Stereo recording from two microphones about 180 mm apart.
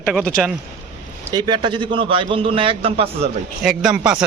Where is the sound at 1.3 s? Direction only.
25° right (ahead or behind).